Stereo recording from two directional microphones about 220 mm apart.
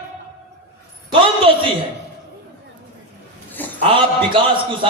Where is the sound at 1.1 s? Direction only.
25° right (ahead or behind).